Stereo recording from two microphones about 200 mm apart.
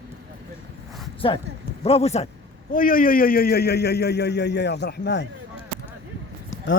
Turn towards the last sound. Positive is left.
turn(degrees=75)  # may be behind; listen again after turning